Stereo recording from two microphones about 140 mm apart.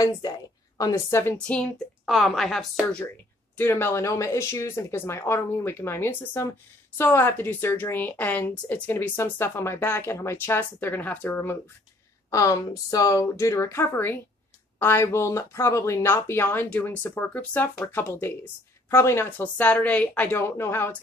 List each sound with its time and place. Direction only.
0.2 s speech: 25° left (ahead or behind)
1.5 s a woman's voice: 5° left (ahead or behind)
3.5 s speech: 15° left (ahead or behind)